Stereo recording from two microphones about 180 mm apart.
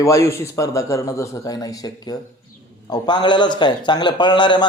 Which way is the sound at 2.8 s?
25° left (ahead or behind).